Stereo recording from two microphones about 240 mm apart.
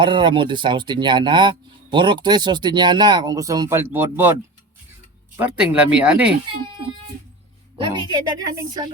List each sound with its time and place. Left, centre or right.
0.0 s speech: centre
5.4 s speech: centre
7.8 s a woman's voice: centre